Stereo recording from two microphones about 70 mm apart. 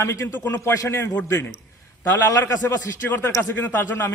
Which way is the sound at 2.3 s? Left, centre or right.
Left.